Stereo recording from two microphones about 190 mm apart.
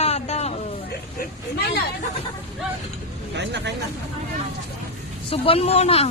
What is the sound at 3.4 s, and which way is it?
Speech, 65° right (ahead or behind).